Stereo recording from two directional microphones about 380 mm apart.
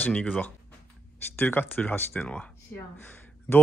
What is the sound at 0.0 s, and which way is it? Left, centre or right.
Speech, centre.